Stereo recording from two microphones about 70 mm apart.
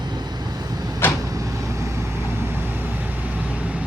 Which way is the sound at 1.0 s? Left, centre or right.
Left.